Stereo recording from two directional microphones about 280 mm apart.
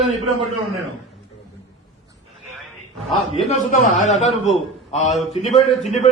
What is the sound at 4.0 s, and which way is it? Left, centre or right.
A man's voice, left.